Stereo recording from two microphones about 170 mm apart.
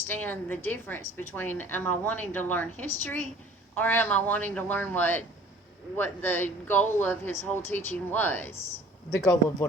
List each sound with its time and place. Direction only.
0.1 s a woman's voice: 10° left (ahead or behind)